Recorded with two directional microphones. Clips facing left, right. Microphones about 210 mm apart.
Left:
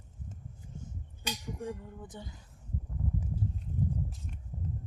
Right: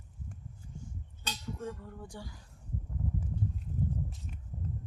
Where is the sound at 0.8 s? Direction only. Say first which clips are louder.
Left 2 dB; 15° left (ahead or behind).